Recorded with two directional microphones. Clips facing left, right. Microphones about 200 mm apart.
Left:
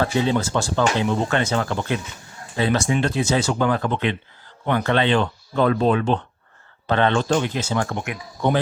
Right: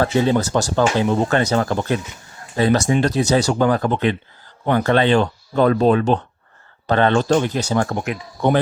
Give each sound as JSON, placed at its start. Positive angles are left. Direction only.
{"t": 0.0, "sound": "speech", "side_deg": -45}